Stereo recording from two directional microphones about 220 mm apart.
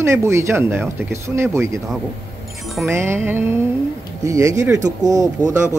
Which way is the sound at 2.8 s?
10° right (ahead or behind).